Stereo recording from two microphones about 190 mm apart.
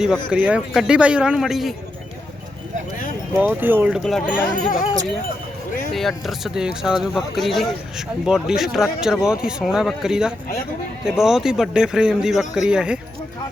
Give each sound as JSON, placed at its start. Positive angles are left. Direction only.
{"t": 0.3, "sound": "speech", "side_deg": -5}
{"t": 3.4, "sound": "speech", "side_deg": -10}
{"t": 4.3, "sound": "speech", "side_deg": 45}
{"t": 5.9, "sound": "speech", "side_deg": 0}